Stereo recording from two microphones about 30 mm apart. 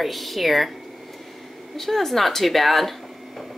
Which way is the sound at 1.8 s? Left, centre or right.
Centre.